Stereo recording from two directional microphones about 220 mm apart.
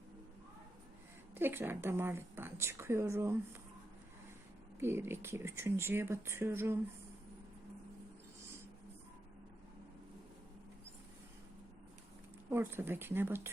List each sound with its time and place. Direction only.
1.4 s a woman's voice: 10° right (ahead or behind)
4.8 s a woman's voice: 10° right (ahead or behind)
12.5 s a woman's voice: 10° right (ahead or behind)